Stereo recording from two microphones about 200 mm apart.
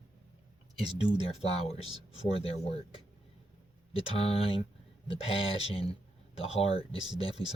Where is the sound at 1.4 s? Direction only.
30° left (ahead or behind).